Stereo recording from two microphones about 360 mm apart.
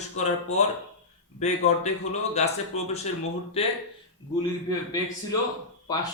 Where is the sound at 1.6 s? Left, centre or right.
Centre.